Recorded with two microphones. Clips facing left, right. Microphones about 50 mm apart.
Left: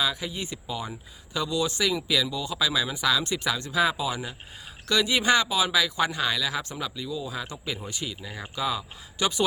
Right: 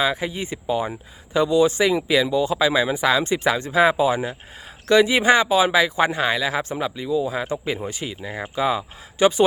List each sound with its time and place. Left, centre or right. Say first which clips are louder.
0.0 s speech: right 6 dB; right